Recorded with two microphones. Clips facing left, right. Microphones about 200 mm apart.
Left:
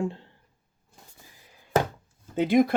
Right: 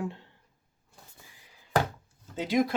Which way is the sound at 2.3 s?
55° left (ahead or behind).